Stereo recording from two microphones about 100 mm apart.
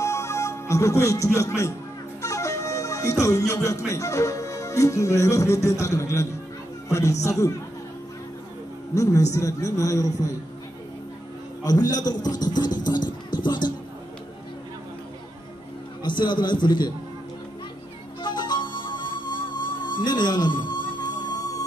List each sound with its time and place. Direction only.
0.0 s music: 30° left (ahead or behind)
2.2 s a man's voice: 30° left (ahead or behind)
8.9 s a man's voice: 30° left (ahead or behind)
11.6 s music: 40° left (ahead or behind)
16.0 s a man's voice: 50° left (ahead or behind)
18.2 s music: 45° left (ahead or behind)